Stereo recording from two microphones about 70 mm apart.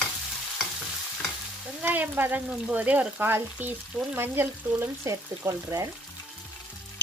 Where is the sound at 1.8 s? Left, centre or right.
Right.